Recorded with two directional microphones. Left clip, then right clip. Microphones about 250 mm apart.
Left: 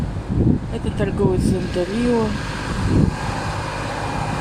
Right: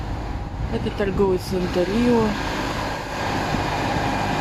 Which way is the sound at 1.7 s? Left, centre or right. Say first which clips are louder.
Right 1 dB; right.